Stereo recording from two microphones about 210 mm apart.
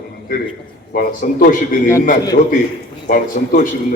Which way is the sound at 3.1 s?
40° left (ahead or behind).